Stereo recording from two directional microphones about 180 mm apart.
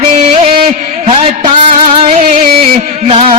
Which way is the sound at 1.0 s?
30° right (ahead or behind).